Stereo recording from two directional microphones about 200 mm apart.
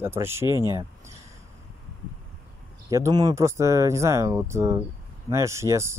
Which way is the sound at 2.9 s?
15° right (ahead or behind).